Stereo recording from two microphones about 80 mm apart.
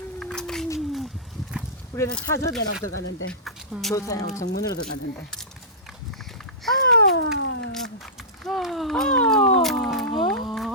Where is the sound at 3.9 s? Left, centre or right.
Left.